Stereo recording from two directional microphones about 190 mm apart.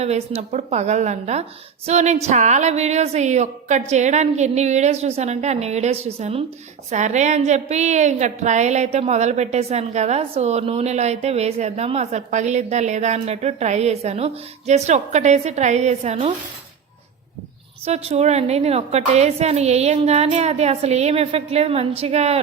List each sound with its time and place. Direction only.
0.0 s a woman's voice: 35° right (ahead or behind)
17.8 s a woman's voice: 35° right (ahead or behind)